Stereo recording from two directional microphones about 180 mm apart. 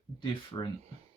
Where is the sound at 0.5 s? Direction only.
20° left (ahead or behind).